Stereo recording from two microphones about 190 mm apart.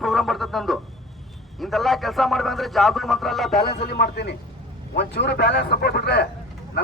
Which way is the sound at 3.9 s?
60° left (ahead or behind).